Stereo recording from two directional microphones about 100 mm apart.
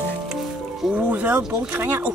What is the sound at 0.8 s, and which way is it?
Speech, 10° right (ahead or behind).